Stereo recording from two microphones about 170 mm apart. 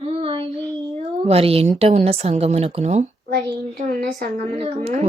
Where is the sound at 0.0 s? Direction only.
35° right (ahead or behind).